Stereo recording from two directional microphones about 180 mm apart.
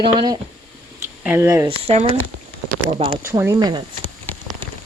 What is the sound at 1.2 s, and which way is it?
Speech, 10° right (ahead or behind).